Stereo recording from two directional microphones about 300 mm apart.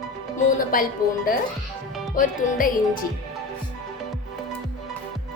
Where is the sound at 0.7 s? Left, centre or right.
Left.